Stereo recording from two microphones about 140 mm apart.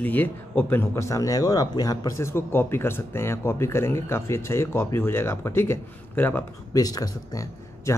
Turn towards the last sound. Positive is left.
turn(degrees=25)  # may be behind; listen again after turning